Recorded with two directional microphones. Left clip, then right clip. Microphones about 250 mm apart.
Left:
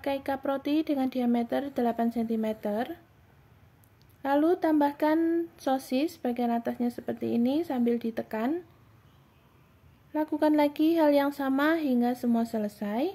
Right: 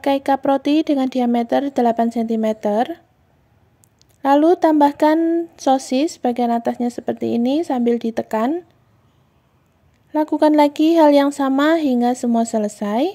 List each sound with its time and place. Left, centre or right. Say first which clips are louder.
0.0 s speech: right 13 dB; right
4.2 s speech: right 12 dB; right
10.1 s speech: right 11 dB; right